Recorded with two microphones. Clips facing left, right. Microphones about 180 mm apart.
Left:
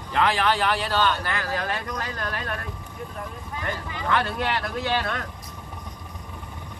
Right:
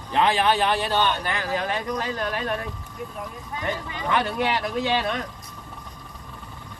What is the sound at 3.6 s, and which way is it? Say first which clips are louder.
Speech: right 2 dB; 20° right (ahead or behind).